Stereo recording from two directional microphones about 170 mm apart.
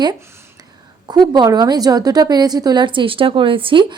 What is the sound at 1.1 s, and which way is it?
A woman's voice, 25° right (ahead or behind).